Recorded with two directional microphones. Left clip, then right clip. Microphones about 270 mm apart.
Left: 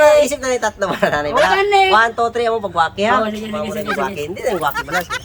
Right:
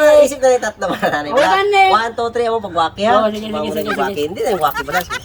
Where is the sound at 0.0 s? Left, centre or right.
Centre.